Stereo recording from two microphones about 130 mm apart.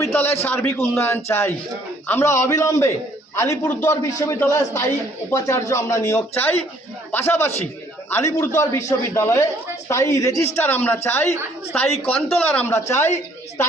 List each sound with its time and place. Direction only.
0.0 s a man's voice: 15° left (ahead or behind)
3.6 s a woman's voice: 15° left (ahead or behind)